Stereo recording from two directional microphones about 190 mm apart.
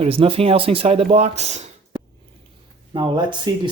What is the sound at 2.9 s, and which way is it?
Speech, 25° right (ahead or behind).